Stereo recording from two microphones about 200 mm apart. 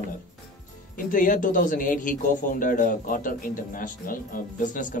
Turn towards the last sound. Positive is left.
turn(degrees=40)  # may be behind; listen again after turning